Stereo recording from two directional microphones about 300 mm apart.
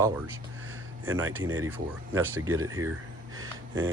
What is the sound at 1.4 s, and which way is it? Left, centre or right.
Speech, right.